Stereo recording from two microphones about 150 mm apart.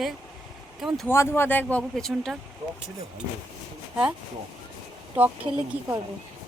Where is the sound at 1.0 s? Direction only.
15° left (ahead or behind).